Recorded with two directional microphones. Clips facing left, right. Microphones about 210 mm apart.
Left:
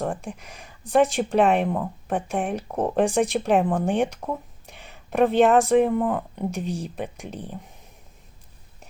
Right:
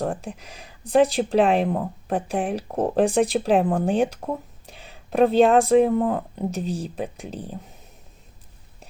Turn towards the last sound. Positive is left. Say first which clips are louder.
# right 2 dB
turn(degrees=-35)  # may be behind; listen again after turning